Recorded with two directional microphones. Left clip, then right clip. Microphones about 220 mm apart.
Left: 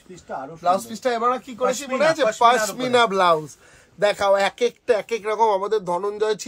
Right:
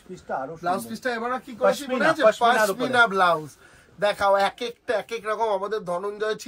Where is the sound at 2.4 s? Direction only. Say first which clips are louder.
Left 3 dB; 35° left (ahead or behind).